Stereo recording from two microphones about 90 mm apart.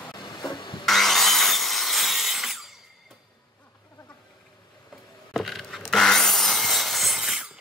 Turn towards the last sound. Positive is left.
turn(degrees=-5)  # may be behind; listen again after turning